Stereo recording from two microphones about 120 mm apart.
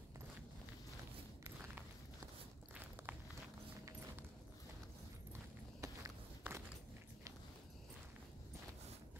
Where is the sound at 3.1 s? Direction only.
15° right (ahead or behind).